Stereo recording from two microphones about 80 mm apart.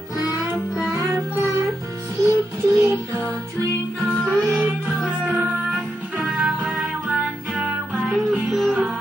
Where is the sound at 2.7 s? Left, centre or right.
Right.